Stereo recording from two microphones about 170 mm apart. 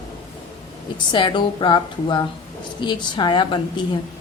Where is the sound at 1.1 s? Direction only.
25° left (ahead or behind).